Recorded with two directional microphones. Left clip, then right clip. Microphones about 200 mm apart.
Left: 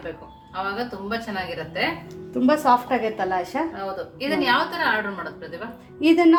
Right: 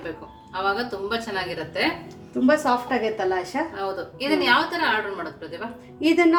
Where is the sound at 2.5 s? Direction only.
30° left (ahead or behind).